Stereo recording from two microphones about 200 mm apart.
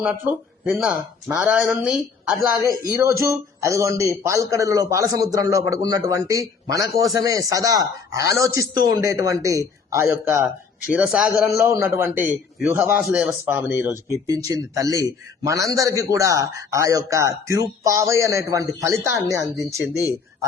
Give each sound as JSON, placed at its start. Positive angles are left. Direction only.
{"t": 0.0, "sound": "speech", "side_deg": -5}
{"t": 2.9, "sound": "a man's voice", "side_deg": -15}
{"t": 11.7, "sound": "a man's voice", "side_deg": -15}
{"t": 19.5, "sound": "speech", "side_deg": 0}